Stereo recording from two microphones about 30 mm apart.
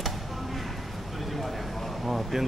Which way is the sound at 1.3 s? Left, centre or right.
Centre.